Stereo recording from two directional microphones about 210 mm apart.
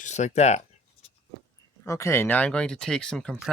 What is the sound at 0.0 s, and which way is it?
Speech, 35° left (ahead or behind).